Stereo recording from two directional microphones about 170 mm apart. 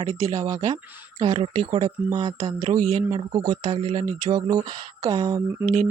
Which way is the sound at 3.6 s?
35° right (ahead or behind).